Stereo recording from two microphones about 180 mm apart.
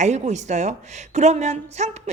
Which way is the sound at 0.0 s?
40° right (ahead or behind).